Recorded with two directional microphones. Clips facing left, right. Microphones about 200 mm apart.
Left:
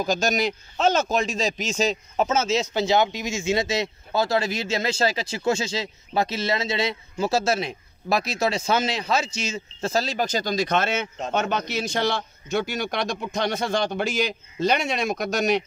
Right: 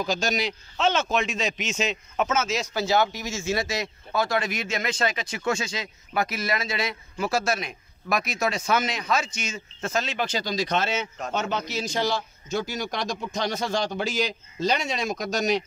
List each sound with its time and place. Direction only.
0.0 s a man's voice: 45° left (ahead or behind)